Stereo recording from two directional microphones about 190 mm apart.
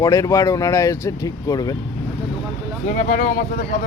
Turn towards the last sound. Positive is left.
turn(degrees=45)  # may be behind; listen again after turning